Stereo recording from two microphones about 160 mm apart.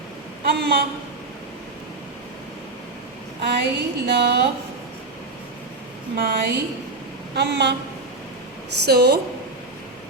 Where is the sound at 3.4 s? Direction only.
90° right.